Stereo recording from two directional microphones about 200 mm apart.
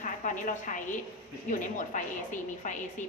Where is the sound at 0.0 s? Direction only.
40° left (ahead or behind).